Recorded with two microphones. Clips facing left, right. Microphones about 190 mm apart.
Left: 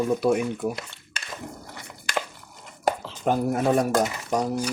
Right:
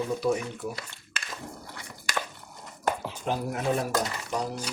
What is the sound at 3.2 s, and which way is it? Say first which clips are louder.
Speech: left 6 dB; 50° left (ahead or behind).